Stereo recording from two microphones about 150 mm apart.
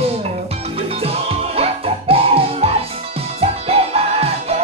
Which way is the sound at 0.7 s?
40° right (ahead or behind).